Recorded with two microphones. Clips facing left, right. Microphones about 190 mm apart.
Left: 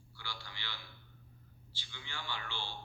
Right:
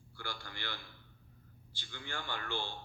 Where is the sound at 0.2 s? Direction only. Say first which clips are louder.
Right 4 dB; 50° right (ahead or behind).